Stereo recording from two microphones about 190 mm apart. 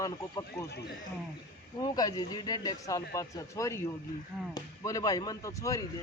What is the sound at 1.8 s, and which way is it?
Speech, 20° left (ahead or behind).